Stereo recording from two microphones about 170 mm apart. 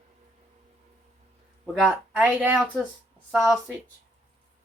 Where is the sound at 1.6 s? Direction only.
Centre (ahead or behind).